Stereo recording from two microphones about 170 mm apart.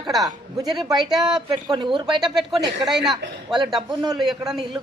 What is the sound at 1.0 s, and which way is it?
Speech, centre (ahead or behind).